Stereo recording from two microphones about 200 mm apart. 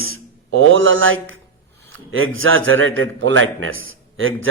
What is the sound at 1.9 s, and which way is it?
A man's voice, 85° right.